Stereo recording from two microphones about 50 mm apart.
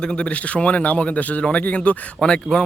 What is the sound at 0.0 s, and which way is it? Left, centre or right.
Speech, centre.